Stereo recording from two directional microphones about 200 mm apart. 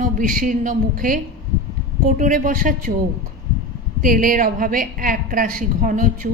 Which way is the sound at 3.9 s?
45° right (ahead or behind).